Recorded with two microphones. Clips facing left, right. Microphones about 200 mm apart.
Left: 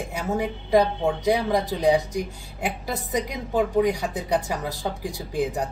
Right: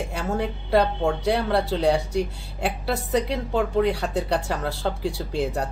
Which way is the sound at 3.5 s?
15° left (ahead or behind).